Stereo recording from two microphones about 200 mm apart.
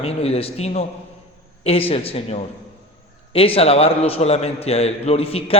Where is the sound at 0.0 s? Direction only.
30° left (ahead or behind).